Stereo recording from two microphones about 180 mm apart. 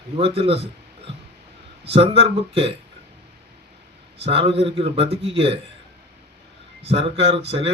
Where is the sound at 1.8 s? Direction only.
30° right (ahead or behind).